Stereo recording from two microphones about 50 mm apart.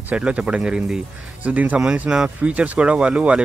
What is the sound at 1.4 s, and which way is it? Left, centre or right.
Speech, right.